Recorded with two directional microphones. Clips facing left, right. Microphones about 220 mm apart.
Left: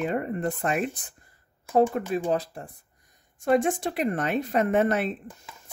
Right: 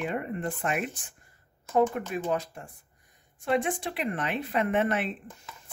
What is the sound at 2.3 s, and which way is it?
Speech, 35° left (ahead or behind).